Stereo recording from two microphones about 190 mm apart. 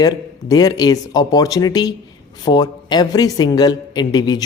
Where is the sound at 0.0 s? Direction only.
20° left (ahead or behind).